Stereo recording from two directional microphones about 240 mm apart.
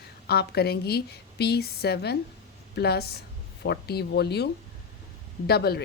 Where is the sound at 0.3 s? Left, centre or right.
Left.